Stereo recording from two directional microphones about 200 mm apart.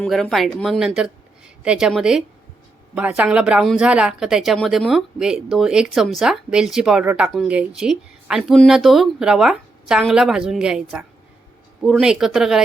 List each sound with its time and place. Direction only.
0.0 s speech: centre (ahead or behind)